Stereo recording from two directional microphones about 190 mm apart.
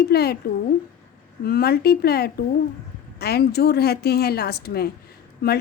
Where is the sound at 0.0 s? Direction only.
55° left (ahead or behind).